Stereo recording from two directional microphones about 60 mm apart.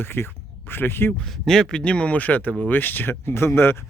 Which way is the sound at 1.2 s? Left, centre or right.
Centre.